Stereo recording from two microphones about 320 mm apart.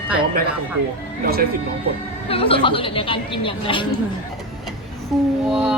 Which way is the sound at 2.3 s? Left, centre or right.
Centre.